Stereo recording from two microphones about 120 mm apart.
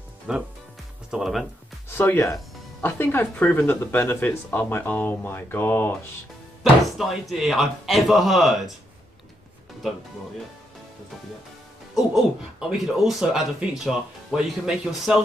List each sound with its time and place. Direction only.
0.3 s speech: 5° right (ahead or behind)
1.9 s speech: 20° left (ahead or behind)
7.0 s speech: centre (ahead or behind)
11.9 s speech: 5° right (ahead or behind)